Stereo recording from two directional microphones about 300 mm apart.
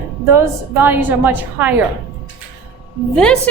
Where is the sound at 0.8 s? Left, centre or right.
Centre.